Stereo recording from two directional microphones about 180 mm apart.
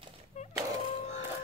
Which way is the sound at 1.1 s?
15° right (ahead or behind).